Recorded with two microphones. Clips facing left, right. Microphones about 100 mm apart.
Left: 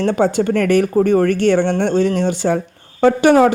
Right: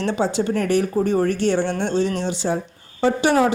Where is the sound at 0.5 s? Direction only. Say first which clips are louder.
Left 5 dB; 65° left (ahead or behind).